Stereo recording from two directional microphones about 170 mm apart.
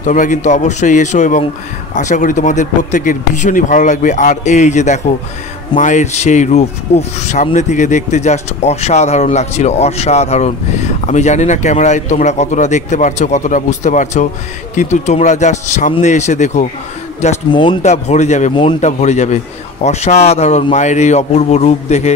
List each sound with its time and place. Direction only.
0.0 s speech: 50° left (ahead or behind)
17.5 s speech: 30° left (ahead or behind)
17.8 s a man's voice: 40° left (ahead or behind)
18.5 s speech: 30° left (ahead or behind)
18.8 s a man's voice: 40° left (ahead or behind)